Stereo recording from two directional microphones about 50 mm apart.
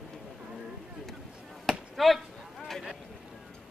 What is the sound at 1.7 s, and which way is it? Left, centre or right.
Basketball bounce, centre.